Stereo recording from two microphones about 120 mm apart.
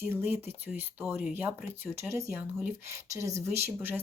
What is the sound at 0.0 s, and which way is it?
Speech, 20° right (ahead or behind).